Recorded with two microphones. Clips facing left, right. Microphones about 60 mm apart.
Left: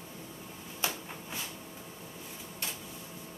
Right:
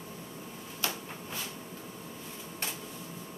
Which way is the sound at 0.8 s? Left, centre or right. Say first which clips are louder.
Even; left.